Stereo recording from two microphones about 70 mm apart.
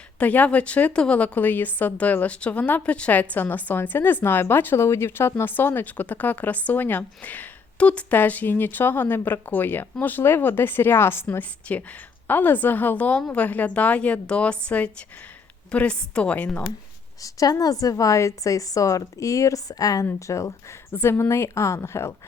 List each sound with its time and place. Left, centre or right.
0.2 s a woman's voice: left
17.2 s a woman's voice: left
20.1 s speech: left
20.9 s a woman's voice: left